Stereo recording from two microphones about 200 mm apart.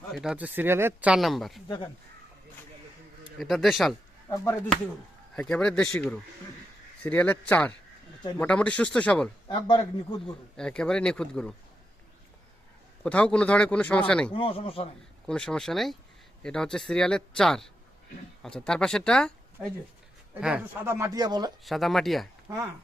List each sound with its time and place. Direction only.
0.1 s speech: centre (ahead or behind)
1.6 s a man's voice: 20° left (ahead or behind)
3.3 s speech: centre (ahead or behind)
4.3 s speech: 15° left (ahead or behind)
9.5 s a man's voice: 25° left (ahead or behind)
10.6 s speech: 5° left (ahead or behind)
13.0 s speech: 5° left (ahead or behind)
14.3 s a man's voice: 25° left (ahead or behind)
15.3 s speech: 5° left (ahead or behind)
20.3 s speech: 5° right (ahead or behind)
21.6 s speech: centre (ahead or behind)
22.5 s speech: 15° right (ahead or behind)